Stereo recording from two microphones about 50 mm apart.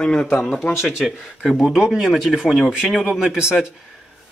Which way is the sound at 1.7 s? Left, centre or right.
Centre.